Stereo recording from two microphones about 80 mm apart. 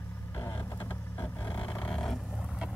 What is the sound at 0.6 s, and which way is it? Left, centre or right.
Vehicle, left.